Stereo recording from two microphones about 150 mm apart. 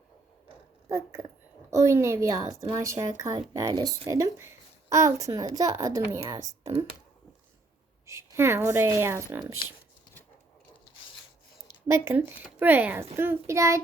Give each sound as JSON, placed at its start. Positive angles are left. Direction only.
{"t": 0.9, "sound": "a woman's voice", "side_deg": -20}
{"t": 8.0, "sound": "a woman's voice", "side_deg": -20}
{"t": 11.9, "sound": "a woman's voice", "side_deg": -15}